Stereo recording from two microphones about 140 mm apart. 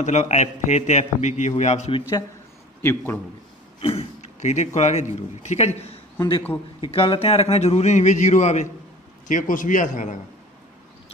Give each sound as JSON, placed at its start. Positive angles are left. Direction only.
{"t": 0.0, "sound": "a man's voice", "side_deg": 55}
{"t": 2.8, "sound": "a man's voice", "side_deg": 15}
{"t": 3.8, "sound": "a man's voice", "side_deg": 45}
{"t": 6.1, "sound": "a man's voice", "side_deg": 30}
{"t": 9.3, "sound": "a man's voice", "side_deg": 70}